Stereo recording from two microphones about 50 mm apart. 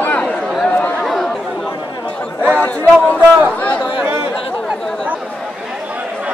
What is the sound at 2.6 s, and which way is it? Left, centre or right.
Chatter, left.